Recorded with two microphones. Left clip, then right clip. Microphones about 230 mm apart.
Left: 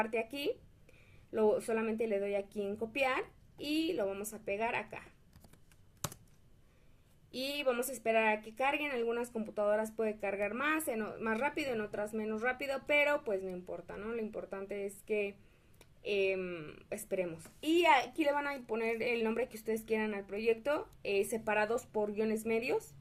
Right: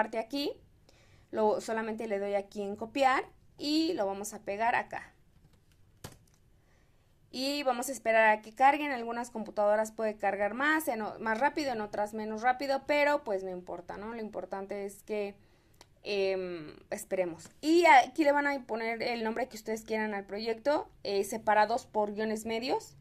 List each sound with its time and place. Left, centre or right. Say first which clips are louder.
0.0 s speech: right 3 dB; centre
7.3 s a woman's voice: right 5 dB; right
7.6 s speech: right 1 dB; centre